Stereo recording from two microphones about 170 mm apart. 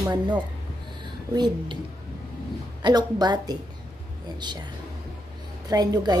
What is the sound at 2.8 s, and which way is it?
A woman's voice, 25° right (ahead or behind).